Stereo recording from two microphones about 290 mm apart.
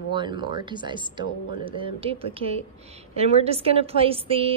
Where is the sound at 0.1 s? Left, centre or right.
Centre.